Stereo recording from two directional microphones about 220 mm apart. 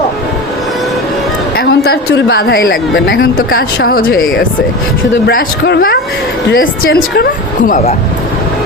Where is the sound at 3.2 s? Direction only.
40° left (ahead or behind).